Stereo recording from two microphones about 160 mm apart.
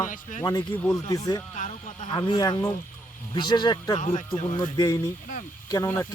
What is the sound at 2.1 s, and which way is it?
Speech, 30° left (ahead or behind).